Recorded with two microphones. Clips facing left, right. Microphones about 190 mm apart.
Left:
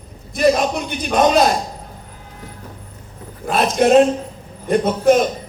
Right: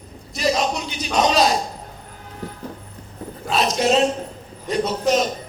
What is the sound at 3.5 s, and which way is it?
A man's voice, 55° left (ahead or behind).